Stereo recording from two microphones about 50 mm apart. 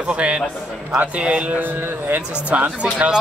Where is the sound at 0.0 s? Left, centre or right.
Right.